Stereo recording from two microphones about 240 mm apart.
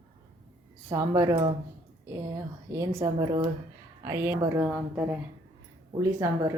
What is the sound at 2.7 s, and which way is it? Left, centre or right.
Speech, centre.